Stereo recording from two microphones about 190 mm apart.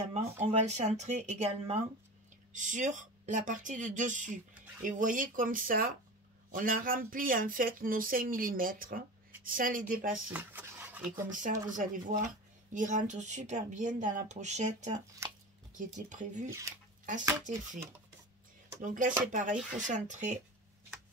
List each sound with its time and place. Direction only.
0.1 s speech: 35° right (ahead or behind)
10.3 s speech: 10° right (ahead or behind)
11.2 s speech: 45° right (ahead or behind)
16.1 s speech: 40° right (ahead or behind)
16.4 s speech: 15° right (ahead or behind)
18.8 s speech: 45° right (ahead or behind)